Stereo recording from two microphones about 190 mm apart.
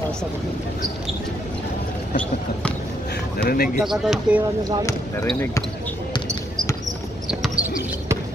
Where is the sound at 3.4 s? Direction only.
50° left (ahead or behind).